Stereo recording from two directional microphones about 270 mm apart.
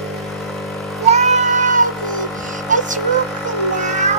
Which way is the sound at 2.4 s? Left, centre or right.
Centre.